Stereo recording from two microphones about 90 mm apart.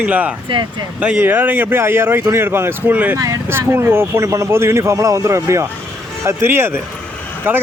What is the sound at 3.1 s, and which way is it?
Speech, 35° right (ahead or behind).